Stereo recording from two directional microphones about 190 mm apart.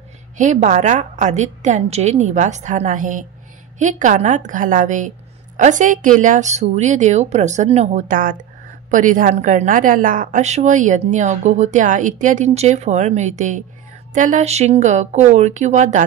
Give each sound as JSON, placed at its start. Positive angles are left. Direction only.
{"t": 0.4, "sound": "a woman's voice", "side_deg": -40}